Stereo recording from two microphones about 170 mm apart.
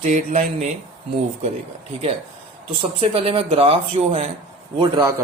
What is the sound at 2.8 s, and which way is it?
Speech, 35° right (ahead or behind).